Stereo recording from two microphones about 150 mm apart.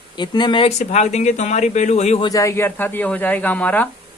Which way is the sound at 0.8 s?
50° left (ahead or behind).